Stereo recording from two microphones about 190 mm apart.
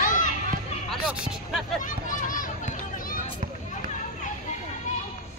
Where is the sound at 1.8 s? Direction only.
45° left (ahead or behind).